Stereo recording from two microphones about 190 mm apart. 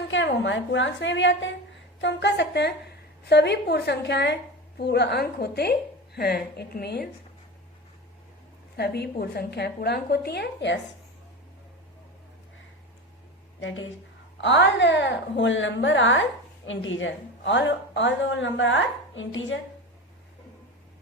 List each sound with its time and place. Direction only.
0.1 s a woman's voice: 75° left (ahead or behind); by 7.1 s 55° left (ahead or behind)
8.7 s a woman's voice: 60° left (ahead or behind)
13.6 s a woman's voice: 90° left
14.4 s a woman's voice: 70° left (ahead or behind); by 19.5 s 90° left